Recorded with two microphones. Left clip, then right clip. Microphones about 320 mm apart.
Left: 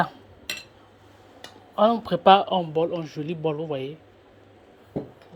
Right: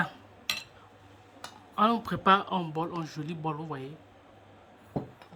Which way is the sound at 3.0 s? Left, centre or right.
Centre.